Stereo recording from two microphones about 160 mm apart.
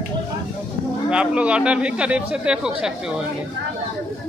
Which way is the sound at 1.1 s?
5° right (ahead or behind).